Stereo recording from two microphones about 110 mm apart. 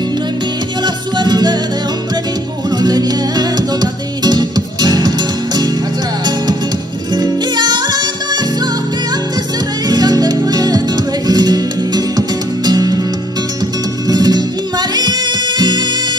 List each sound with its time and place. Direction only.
0.8 s music: 40° right (ahead or behind)
2.8 s music: 40° right (ahead or behind)
7.2 s music: 40° right (ahead or behind)
9.8 s music: 40° right (ahead or behind)
14.0 s music: 40° right (ahead or behind)